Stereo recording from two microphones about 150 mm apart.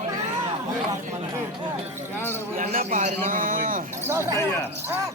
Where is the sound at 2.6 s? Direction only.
65° right (ahead or behind).